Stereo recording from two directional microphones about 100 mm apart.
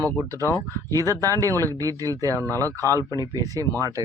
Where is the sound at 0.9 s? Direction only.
35° right (ahead or behind).